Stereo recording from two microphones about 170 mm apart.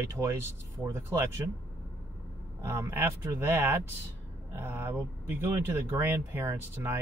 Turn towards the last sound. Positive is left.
turn(degrees=-15)  # may be behind; listen again after turning